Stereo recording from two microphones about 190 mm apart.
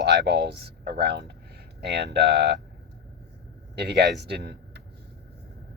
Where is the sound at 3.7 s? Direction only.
60° right (ahead or behind).